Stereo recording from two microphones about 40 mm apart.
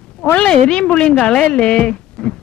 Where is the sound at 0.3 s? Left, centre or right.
Left.